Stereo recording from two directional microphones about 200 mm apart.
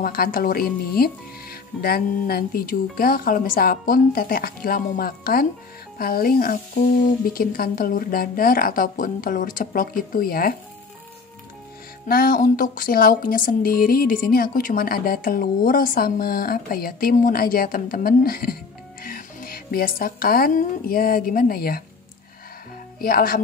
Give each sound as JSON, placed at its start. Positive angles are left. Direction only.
{"t": 0.0, "sound": "speech", "side_deg": 45}
{"t": 12.1, "sound": "speech", "side_deg": 45}
{"t": 22.9, "sound": "speech", "side_deg": 50}